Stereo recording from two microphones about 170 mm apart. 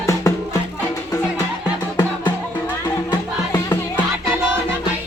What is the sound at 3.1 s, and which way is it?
Music, 25° left (ahead or behind).